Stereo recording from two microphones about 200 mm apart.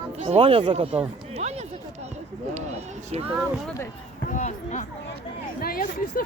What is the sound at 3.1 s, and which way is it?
Speech, 30° right (ahead or behind).